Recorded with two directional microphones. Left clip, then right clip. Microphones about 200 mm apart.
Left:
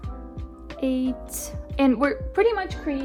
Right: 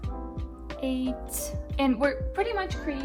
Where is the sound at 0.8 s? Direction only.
45° left (ahead or behind).